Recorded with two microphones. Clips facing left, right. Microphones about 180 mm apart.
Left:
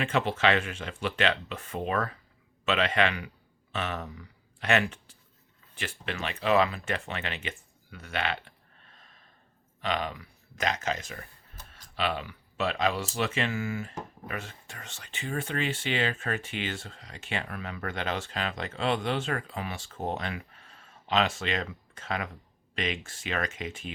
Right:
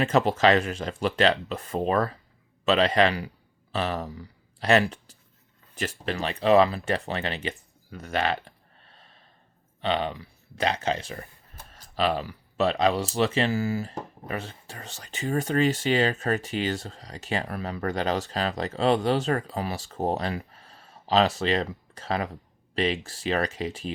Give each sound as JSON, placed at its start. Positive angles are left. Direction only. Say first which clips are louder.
{"t": 0.0, "sound": "speech", "louder": "right 5 dB", "side_deg": -40}